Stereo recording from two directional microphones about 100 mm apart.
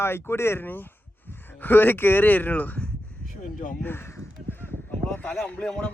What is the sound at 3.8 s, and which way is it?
Crow, 25° left (ahead or behind).